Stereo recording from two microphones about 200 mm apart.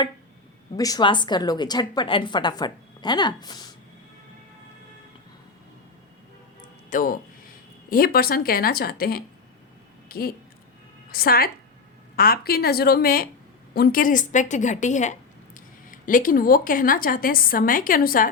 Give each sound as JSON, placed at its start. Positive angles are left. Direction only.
{"t": 0.8, "sound": "a woman's voice", "side_deg": 20}
{"t": 6.9, "sound": "a woman's voice", "side_deg": 45}